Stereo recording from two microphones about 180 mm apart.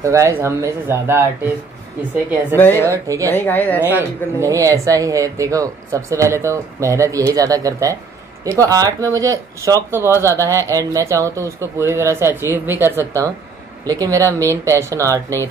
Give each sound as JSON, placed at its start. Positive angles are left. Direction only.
{"t": 0.0, "sound": "speech", "side_deg": -15}
{"t": 2.6, "sound": "speech", "side_deg": 10}
{"t": 2.9, "sound": "speech", "side_deg": -15}
{"t": 3.3, "sound": "speech", "side_deg": 10}
{"t": 4.4, "sound": "speech", "side_deg": -15}